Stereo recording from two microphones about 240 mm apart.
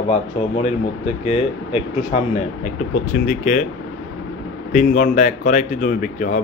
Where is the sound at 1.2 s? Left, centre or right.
Left.